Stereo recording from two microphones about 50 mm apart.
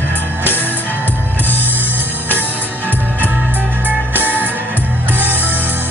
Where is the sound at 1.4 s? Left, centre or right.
Left.